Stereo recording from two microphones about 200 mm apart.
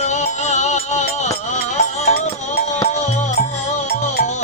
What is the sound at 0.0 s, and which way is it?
Music, 35° left (ahead or behind).